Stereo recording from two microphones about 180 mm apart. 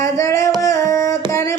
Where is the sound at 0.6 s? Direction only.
15° left (ahead or behind).